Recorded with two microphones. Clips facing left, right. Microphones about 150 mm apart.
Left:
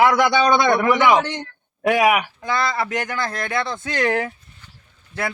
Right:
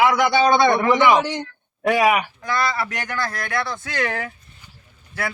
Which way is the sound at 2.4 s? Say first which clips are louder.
Left 1 dB; 20° left (ahead or behind).